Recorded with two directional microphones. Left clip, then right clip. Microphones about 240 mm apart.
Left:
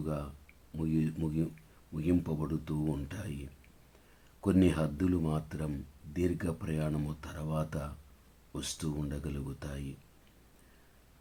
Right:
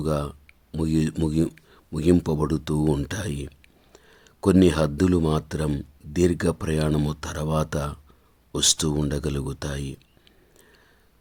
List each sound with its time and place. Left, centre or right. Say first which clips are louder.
0.0 s speech: right 12 dB; right